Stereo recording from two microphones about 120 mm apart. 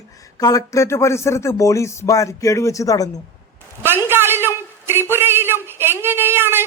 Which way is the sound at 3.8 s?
20° right (ahead or behind).